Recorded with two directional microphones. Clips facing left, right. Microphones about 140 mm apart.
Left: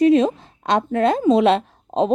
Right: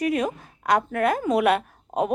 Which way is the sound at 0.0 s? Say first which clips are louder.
Left 9 dB; 25° left (ahead or behind).